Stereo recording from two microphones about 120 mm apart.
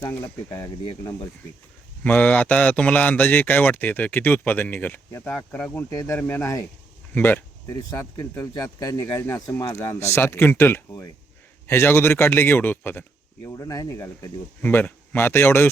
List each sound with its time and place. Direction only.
0.1 s speech: 20° left (ahead or behind)
2.0 s a man's voice: 15° left (ahead or behind)
8.4 s a man's voice: 25° left (ahead or behind)
13.5 s speech: 30° left (ahead or behind)